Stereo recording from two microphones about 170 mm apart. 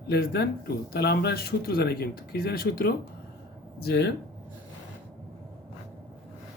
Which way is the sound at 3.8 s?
70° left (ahead or behind).